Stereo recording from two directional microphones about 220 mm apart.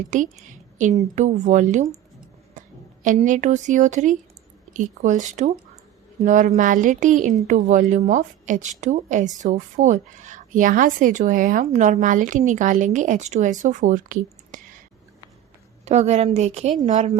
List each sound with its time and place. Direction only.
0.1 s a woman's voice: 35° right (ahead or behind)
15.8 s a woman's voice: 30° right (ahead or behind)